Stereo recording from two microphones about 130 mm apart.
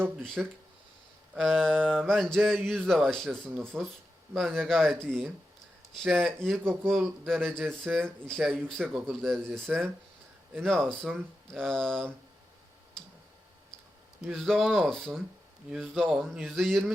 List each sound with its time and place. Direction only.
0.2 s speech: 5° left (ahead or behind)
14.2 s speech: centre (ahead or behind)